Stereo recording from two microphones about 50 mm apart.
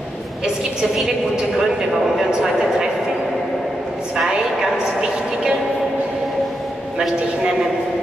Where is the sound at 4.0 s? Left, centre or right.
Centre.